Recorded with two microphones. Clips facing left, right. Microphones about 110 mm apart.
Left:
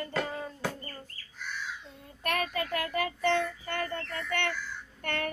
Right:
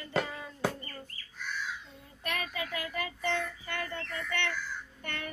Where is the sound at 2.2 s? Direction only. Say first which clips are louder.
Left 5 dB; 55° left (ahead or behind).